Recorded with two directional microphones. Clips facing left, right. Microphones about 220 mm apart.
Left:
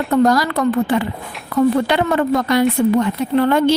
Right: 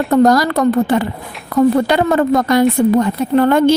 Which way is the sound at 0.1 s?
40° right (ahead or behind).